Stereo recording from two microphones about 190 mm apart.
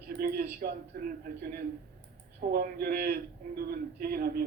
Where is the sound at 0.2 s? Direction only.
55° right (ahead or behind).